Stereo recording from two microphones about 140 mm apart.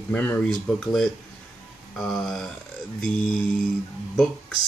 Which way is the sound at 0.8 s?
5° left (ahead or behind).